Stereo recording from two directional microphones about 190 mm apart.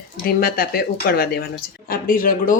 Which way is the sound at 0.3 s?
50° left (ahead or behind).